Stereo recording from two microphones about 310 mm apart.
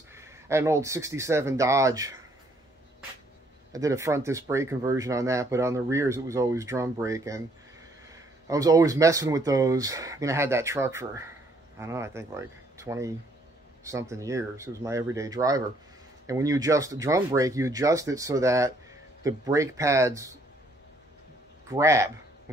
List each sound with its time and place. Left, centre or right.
0.1 s speech: centre
3.7 s speech: centre
21.6 s speech: centre